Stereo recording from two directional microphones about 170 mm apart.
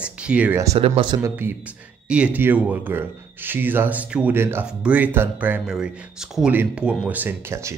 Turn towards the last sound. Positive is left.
turn(degrees=-15)  # may be behind; listen again after turning